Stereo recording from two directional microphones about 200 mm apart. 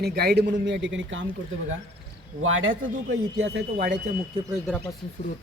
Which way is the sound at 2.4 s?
80° right.